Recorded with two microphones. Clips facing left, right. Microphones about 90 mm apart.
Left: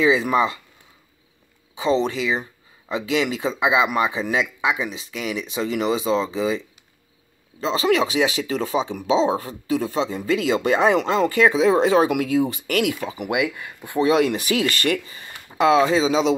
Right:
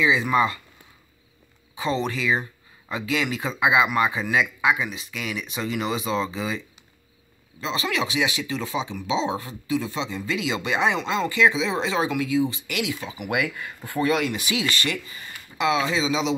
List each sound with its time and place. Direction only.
0.0 s speech: 35° left (ahead or behind)
1.8 s speech: 30° left (ahead or behind)
7.6 s speech: 35° left (ahead or behind)
12.1 s speech: 55° left (ahead or behind)
13.3 s speech: 20° left (ahead or behind)
14.2 s speech: 40° left (ahead or behind)
15.0 s speech: 30° left (ahead or behind)